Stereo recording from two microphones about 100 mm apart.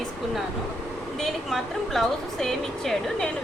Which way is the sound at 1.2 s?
Centre (ahead or behind).